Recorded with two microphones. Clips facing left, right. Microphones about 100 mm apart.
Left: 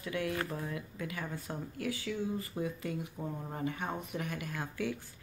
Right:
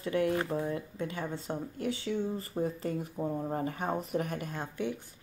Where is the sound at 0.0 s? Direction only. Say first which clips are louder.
Right 6 dB; 35° right (ahead or behind).